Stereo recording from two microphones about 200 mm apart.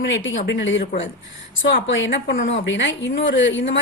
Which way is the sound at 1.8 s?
65° left (ahead or behind).